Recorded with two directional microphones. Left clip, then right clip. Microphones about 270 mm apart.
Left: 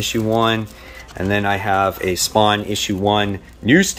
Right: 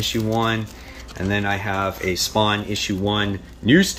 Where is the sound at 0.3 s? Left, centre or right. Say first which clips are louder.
Left 8 dB; centre.